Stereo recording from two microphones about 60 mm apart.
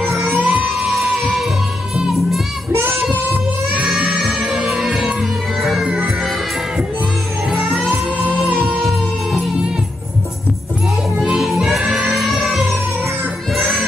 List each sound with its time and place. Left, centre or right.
0.0 s music: centre
4.1 s music: centre
4.4 s music: centre
5.6 s music: centre
5.9 s music: centre
7.5 s music: centre
11.4 s music: centre
13.6 s music: centre